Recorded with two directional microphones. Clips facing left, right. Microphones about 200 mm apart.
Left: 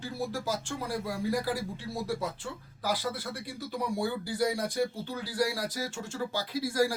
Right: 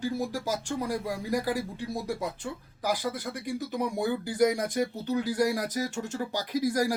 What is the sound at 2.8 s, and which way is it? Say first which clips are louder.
Speech: right 2 dB; 15° right (ahead or behind).